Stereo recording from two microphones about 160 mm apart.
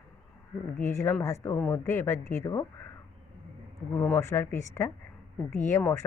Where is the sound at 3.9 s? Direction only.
15° left (ahead or behind).